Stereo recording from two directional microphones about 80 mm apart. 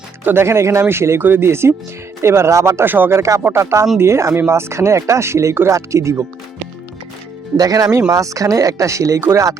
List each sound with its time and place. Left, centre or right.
0.3 s speech: right
7.5 s speech: right